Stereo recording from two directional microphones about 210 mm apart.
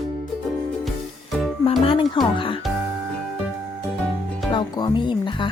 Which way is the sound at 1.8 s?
25° left (ahead or behind).